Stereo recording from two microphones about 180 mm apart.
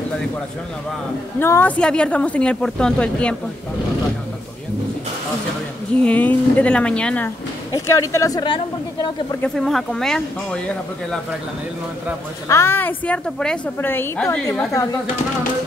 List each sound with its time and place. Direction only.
1.4 s a woman's voice: 10° left (ahead or behind)
6.0 s a woman's voice: 10° left (ahead or behind)
7.7 s a woman's voice: 15° left (ahead or behind)
9.4 s speech: centre (ahead or behind)
12.4 s a woman's voice: 15° left (ahead or behind)
14.7 s speech: 20° left (ahead or behind)